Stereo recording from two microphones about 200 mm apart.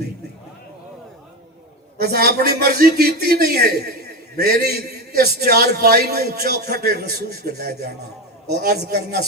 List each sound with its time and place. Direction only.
2.0 s a man's voice: 50° right (ahead or behind)